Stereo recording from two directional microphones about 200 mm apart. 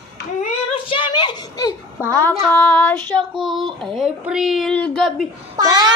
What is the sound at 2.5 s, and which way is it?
Child singing, 10° left (ahead or behind).